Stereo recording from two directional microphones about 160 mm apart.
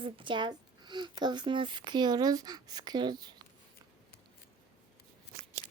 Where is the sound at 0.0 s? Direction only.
30° right (ahead or behind).